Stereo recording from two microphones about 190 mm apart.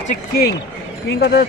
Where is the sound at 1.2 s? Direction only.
60° left (ahead or behind).